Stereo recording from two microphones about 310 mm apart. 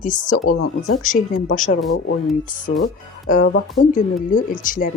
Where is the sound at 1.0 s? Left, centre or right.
Left.